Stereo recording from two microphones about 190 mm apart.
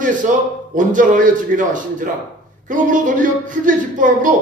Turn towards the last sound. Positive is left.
turn(degrees=-45)  # may be behind; listen again after turning